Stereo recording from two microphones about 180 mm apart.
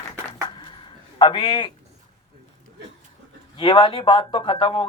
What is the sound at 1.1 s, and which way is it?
Speech, 30° left (ahead or behind).